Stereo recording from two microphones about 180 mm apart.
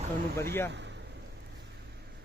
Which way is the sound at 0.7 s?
75° right (ahead or behind).